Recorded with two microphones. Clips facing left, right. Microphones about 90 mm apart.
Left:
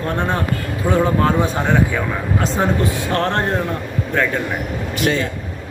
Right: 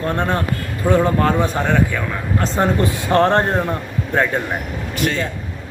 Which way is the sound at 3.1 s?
25° right (ahead or behind).